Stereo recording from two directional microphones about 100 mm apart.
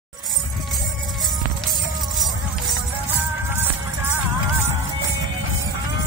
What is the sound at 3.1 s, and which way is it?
Music, 20° right (ahead or behind).